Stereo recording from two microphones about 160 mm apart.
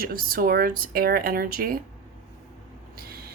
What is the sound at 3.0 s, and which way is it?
Vehicle, 70° right (ahead or behind).